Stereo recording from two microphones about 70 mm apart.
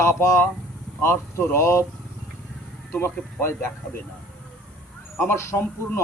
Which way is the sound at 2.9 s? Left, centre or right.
Left.